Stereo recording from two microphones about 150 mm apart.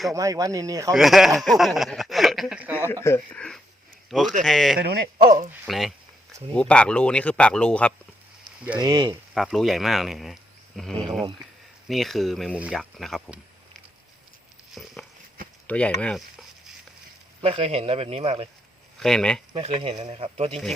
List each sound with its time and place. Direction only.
0.1 s speech: 20° right (ahead or behind)
0.9 s speech: centre (ahead or behind)
2.9 s speech: 15° left (ahead or behind)
4.8 s speech: 85° right; by 5.5 s 65° right (ahead or behind)
5.6 s speech: centre (ahead or behind)
8.8 s speech: 30° right (ahead or behind)
9.3 s speech: centre (ahead or behind)
15.6 s a sound: 10° left (ahead or behind)
17.4 s speech: 40° right (ahead or behind)
18.9 s speech: 5° left (ahead or behind)
19.5 s speech: 40° right (ahead or behind)